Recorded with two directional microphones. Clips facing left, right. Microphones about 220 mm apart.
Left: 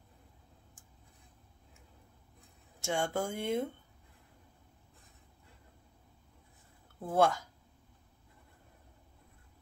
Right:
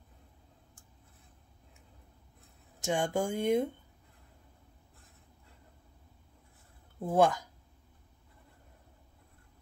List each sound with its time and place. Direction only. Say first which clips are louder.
2.8 s speech: right 3 dB; 15° right (ahead or behind)
7.0 s speech: right 2 dB; 15° right (ahead or behind)